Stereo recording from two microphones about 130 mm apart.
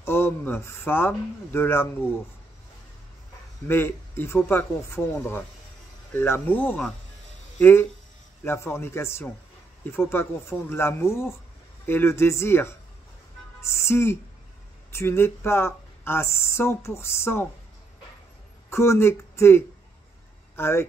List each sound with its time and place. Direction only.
0.0 s speech: 15° left (ahead or behind)
3.6 s speech: 15° left (ahead or behind)
18.7 s speech: 20° left (ahead or behind)